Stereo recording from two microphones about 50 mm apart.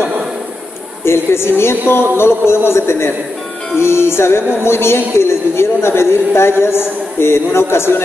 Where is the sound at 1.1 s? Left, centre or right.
Left.